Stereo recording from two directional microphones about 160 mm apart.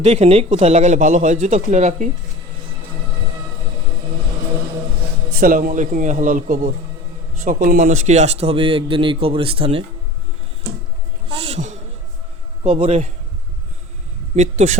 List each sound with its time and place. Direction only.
0.0 s speech: 40° right (ahead or behind)
5.3 s speech: 60° right (ahead or behind); by 9.8 s 35° right (ahead or behind)
11.3 s a woman's voice: 35° right (ahead or behind)
14.3 s speech: 45° right (ahead or behind)